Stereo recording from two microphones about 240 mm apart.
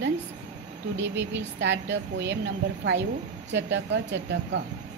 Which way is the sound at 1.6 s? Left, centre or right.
Right.